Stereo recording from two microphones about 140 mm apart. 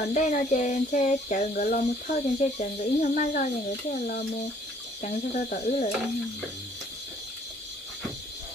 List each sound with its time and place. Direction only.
0.1 s speech: 65° left (ahead or behind)
5.0 s speech: 55° left (ahead or behind)